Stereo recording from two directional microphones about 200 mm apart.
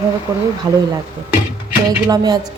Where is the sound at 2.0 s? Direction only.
20° right (ahead or behind).